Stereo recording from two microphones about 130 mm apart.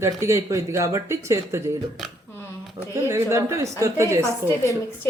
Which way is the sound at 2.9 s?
20° right (ahead or behind).